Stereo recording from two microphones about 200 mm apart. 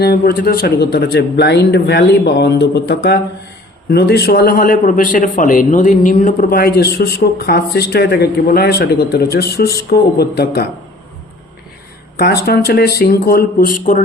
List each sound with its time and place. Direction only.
0.0 s a man's voice: 50° left (ahead or behind)
12.2 s a man's voice: 50° left (ahead or behind)